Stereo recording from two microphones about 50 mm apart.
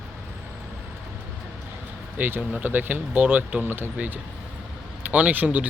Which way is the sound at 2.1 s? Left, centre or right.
Right.